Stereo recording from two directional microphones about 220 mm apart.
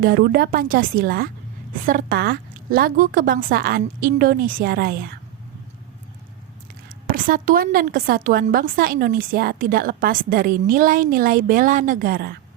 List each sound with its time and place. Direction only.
0.0 s a woman's voice: 45° right (ahead or behind)
6.8 s a woman's voice: 40° right (ahead or behind)